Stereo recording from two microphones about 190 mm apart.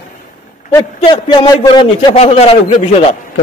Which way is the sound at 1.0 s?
25° left (ahead or behind).